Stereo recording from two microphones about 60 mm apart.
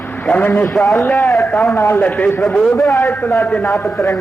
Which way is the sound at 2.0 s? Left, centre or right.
Left.